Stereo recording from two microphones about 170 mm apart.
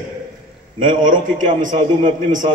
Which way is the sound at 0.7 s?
50° right (ahead or behind).